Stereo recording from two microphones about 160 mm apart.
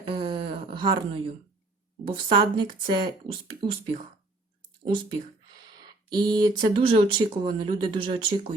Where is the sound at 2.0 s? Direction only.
30° right (ahead or behind).